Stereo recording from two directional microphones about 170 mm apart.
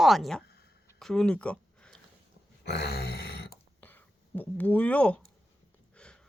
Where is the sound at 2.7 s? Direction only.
75° left (ahead or behind).